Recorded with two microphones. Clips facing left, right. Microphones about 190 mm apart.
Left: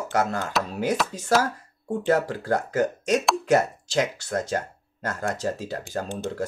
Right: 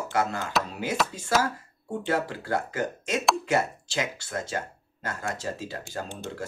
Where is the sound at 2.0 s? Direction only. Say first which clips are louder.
Left 5 dB; 45° left (ahead or behind).